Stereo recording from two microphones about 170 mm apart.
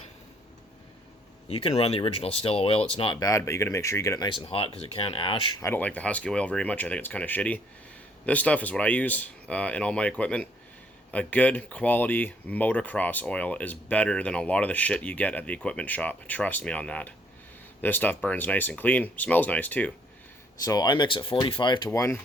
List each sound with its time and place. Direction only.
1.5 s speech: 35° left (ahead or behind); by 4.3 s 15° left (ahead or behind)
4.4 s speech: 35° left (ahead or behind)
5.5 s speech: 15° left (ahead or behind)
20.7 s speech: 25° left (ahead or behind)
21.8 s speech: 15° left (ahead or behind)